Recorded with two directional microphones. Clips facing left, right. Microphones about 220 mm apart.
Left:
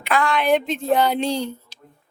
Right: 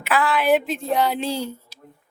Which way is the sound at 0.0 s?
5° right (ahead or behind).